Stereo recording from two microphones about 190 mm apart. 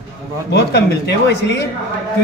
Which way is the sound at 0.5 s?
60° left (ahead or behind).